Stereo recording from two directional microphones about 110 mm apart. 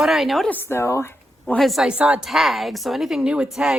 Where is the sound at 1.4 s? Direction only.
5° left (ahead or behind).